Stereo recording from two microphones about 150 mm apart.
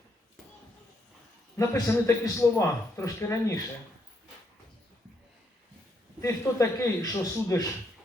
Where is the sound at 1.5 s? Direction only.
20° left (ahead or behind).